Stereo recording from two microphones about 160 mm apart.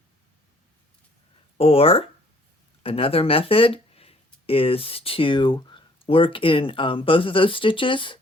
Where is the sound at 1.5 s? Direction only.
35° left (ahead or behind).